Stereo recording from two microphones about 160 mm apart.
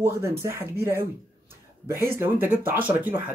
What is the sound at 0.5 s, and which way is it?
Speech, 15° right (ahead or behind).